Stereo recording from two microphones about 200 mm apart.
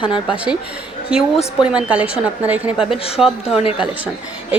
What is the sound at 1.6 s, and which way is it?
A woman's voice, 5° right (ahead or behind).